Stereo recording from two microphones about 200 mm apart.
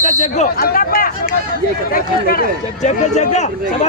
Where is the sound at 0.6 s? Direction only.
45° left (ahead or behind).